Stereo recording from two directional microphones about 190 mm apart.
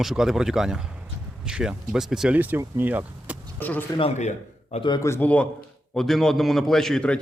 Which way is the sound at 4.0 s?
35° left (ahead or behind).